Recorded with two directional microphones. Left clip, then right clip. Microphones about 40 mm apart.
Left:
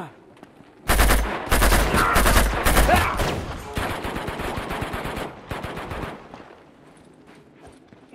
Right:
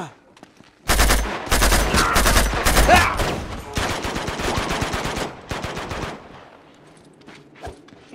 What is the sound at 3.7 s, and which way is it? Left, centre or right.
Machine gun, right.